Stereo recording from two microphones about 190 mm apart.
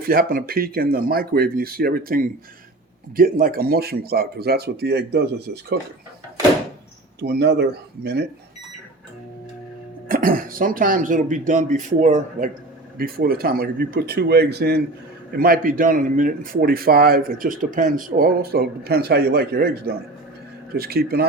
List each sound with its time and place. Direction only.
0.0 s speech: 50° right (ahead or behind)
7.2 s speech: 60° right (ahead or behind)
10.1 s speech: 45° right (ahead or behind)
13.0 s speech: 50° right (ahead or behind)